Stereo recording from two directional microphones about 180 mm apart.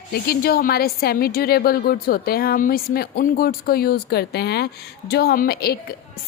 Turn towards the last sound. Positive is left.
turn(degrees=60)  # may be behind; listen again after turning